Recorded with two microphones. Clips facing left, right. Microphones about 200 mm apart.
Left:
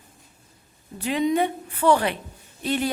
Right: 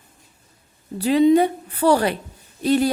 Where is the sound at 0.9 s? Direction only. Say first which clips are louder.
Right 8 dB; 35° right (ahead or behind).